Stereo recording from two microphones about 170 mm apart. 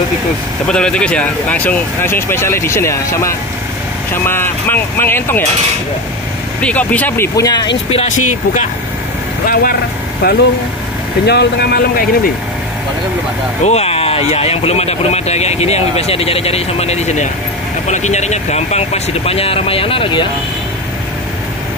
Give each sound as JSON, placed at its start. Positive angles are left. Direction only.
{"t": 0.7, "sound": "speech", "side_deg": 5}
{"t": 6.6, "sound": "speech", "side_deg": 10}
{"t": 7.9, "sound": "speech", "side_deg": 40}
{"t": 9.5, "sound": "speech", "side_deg": 60}
{"t": 13.7, "sound": "speech", "side_deg": 35}